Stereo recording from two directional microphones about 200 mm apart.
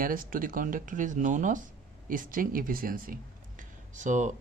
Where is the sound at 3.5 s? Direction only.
40° right (ahead or behind).